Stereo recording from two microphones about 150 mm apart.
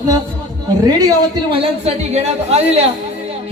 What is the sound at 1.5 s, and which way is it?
A woman's voice, 45° right (ahead or behind).